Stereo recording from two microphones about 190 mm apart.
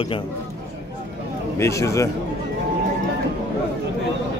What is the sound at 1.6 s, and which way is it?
Speech, 15° left (ahead or behind).